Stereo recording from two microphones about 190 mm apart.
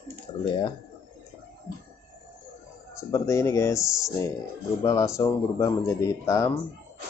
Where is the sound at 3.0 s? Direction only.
15° left (ahead or behind).